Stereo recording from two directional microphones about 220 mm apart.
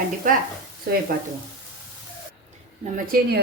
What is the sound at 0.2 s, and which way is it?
Speech, 35° right (ahead or behind).